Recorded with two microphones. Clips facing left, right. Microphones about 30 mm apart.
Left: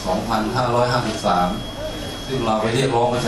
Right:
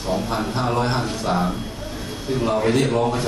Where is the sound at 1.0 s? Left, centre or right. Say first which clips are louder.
Left 3 dB; left.